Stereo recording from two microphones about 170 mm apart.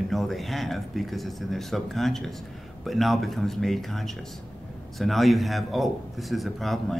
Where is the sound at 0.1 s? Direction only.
Centre (ahead or behind).